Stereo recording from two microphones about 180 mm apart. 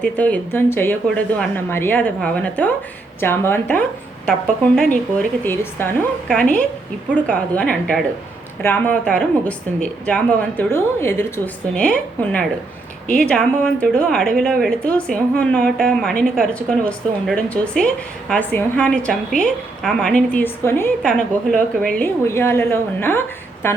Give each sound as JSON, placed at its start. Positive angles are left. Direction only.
{"t": 0.0, "sound": "a woman's voice", "side_deg": 10}